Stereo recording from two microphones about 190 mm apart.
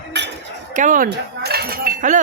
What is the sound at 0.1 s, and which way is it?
Chink, 65° right (ahead or behind).